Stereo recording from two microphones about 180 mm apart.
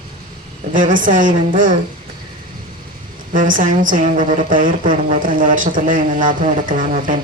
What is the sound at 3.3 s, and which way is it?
A woman's voice, 50° right (ahead or behind).